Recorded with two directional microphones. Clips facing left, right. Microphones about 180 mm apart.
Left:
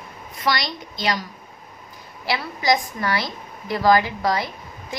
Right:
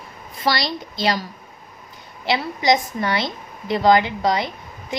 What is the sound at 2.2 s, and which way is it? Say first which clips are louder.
A woman's voice: right 3 dB; 25° right (ahead or behind).